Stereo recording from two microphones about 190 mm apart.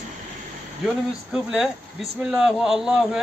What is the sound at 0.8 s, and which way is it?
A man's voice, 5° right (ahead or behind).